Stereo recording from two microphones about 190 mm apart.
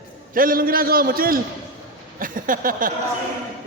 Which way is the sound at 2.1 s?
45° right (ahead or behind).